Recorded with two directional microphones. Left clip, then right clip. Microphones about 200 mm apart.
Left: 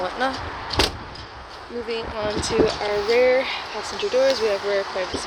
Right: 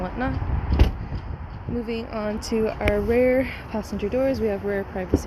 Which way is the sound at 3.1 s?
15° right (ahead or behind).